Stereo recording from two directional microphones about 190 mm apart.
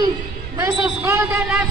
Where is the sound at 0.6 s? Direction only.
10° right (ahead or behind).